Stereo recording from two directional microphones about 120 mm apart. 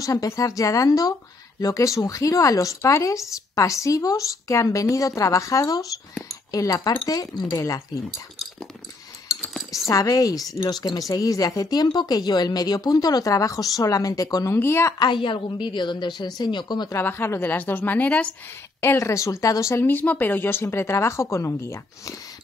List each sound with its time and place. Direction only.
0.0 s speech: 30° left (ahead or behind)
9.3 s cutlery: 25° left (ahead or behind)
9.8 s speech: 30° left (ahead or behind)
15.0 s speech: 40° left (ahead or behind)
16.9 s a woman's voice: 20° left (ahead or behind)
18.8 s speech: 25° left (ahead or behind)